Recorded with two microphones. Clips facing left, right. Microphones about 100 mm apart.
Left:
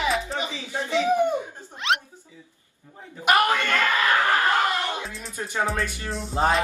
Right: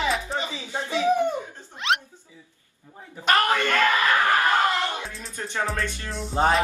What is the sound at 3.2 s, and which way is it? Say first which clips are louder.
Speech: left 1 dB; 15° left (ahead or behind).